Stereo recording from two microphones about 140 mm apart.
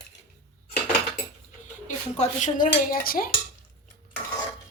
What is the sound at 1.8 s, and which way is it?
Dishes, 60° left (ahead or behind).